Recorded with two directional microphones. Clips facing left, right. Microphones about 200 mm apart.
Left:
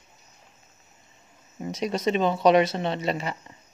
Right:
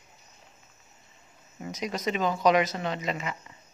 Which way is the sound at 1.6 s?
30° left (ahead or behind).